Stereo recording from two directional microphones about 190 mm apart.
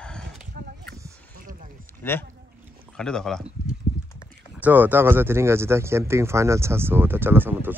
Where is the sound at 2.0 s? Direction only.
10° left (ahead or behind).